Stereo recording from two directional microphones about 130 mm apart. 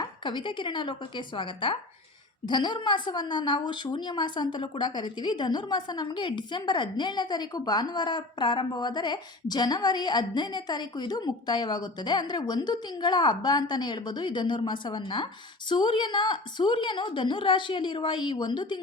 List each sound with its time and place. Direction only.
0.0 s a woman's voice: 35° left (ahead or behind)